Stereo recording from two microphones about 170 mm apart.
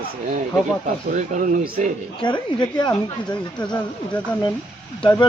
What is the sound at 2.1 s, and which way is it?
Speech, 25° left (ahead or behind).